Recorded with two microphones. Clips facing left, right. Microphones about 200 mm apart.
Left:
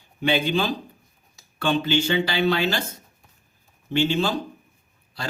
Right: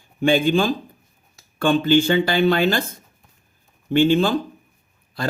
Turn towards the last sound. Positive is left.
turn(degrees=-50)  # may be behind; listen again after turning